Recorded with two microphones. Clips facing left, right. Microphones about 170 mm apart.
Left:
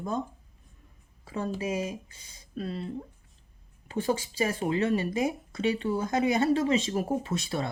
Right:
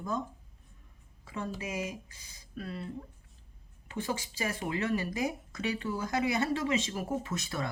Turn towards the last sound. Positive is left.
turn(degrees=30)  # may be behind; listen again after turning